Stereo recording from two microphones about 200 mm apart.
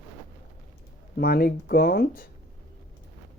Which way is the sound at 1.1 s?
50° left (ahead or behind).